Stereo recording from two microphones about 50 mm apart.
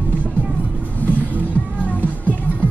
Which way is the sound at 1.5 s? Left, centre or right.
Left.